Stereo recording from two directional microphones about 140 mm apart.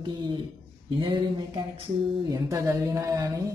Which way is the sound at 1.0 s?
35° right (ahead or behind).